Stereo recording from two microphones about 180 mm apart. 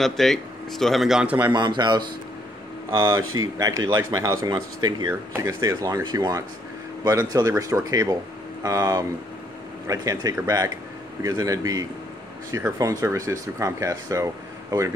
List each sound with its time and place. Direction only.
0.0 s speech: centre (ahead or behind)
1.5 s speech: 25° right (ahead or behind)